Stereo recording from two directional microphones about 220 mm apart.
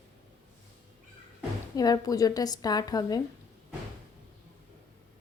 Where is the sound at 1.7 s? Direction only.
15° left (ahead or behind).